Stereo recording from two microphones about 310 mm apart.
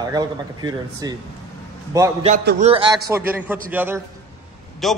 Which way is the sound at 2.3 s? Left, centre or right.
Right.